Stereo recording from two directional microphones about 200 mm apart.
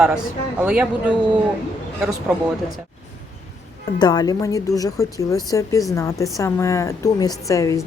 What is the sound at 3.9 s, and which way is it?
A woman's voice, 20° left (ahead or behind).